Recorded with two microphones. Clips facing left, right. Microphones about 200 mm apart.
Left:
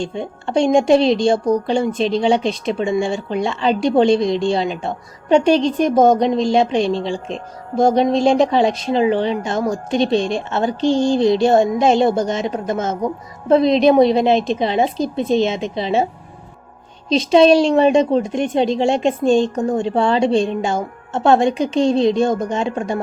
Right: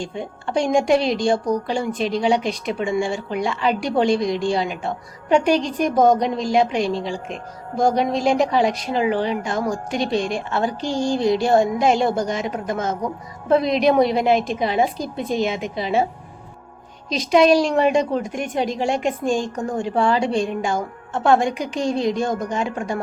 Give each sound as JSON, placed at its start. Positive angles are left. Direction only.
{"t": 0.0, "sound": "a woman's voice", "side_deg": 25}
{"t": 17.1, "sound": "a woman's voice", "side_deg": 25}